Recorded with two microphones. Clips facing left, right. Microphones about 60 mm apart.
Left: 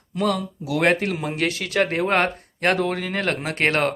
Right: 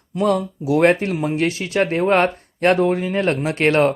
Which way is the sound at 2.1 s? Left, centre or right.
Left.